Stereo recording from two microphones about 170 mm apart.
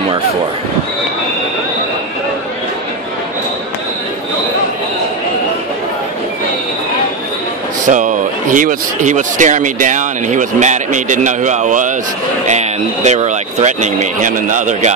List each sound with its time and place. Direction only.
7.8 s speech: 45° right (ahead or behind)